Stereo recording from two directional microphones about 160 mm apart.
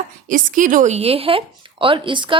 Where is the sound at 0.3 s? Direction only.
55° right (ahead or behind).